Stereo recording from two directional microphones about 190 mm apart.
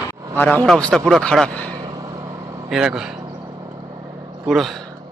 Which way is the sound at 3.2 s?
15° right (ahead or behind).